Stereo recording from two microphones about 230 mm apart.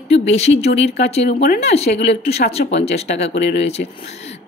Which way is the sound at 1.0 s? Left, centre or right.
Left.